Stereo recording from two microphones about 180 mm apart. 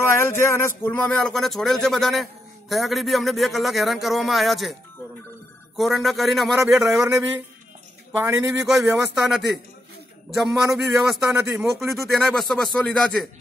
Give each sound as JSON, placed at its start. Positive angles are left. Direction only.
{"t": 0.0, "sound": "speech", "side_deg": 15}
{"t": 5.8, "sound": "speech", "side_deg": 0}
{"t": 6.6, "sound": "a man's voice", "side_deg": -15}
{"t": 8.6, "sound": "speech", "side_deg": -5}
{"t": 10.6, "sound": "speech", "side_deg": -15}
{"t": 11.1, "sound": "speech", "side_deg": -5}
{"t": 11.5, "sound": "speech", "side_deg": -15}
{"t": 11.8, "sound": "speech", "side_deg": 0}